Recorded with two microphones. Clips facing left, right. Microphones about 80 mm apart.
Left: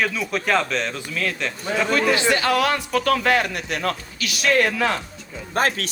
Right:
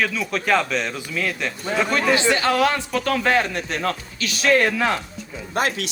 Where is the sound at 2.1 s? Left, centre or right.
Right.